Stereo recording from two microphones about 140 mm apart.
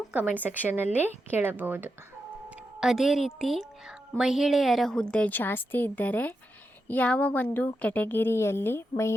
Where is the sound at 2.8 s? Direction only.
Centre (ahead or behind).